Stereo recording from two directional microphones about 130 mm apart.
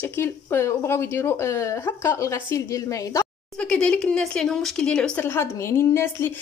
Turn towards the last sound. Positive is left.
turn(degrees=20)  # may be behind; listen again after turning